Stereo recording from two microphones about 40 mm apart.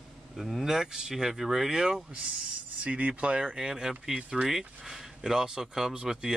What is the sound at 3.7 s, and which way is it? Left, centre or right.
Speech, centre.